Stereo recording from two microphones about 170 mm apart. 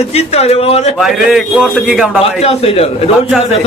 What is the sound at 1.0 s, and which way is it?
A man's voice, 5° right (ahead or behind).